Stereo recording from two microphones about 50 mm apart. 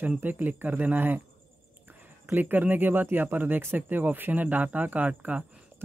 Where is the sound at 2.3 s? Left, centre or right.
Right.